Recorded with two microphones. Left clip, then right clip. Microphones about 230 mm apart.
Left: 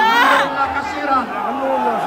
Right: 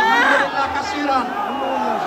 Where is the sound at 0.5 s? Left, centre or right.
Right.